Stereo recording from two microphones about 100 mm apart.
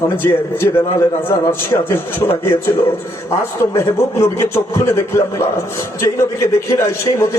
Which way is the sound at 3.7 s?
25° left (ahead or behind).